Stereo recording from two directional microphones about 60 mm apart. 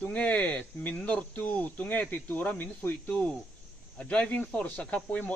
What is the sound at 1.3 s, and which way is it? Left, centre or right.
Speech, left.